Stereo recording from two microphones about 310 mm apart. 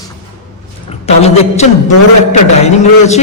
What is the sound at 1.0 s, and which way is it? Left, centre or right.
Speech, left.